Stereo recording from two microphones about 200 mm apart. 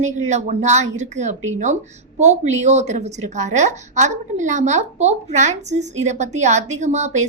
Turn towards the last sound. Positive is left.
turn(degrees=-35)  # may be behind; listen again after turning